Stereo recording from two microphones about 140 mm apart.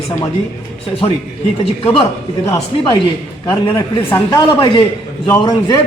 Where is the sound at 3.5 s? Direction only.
30° left (ahead or behind).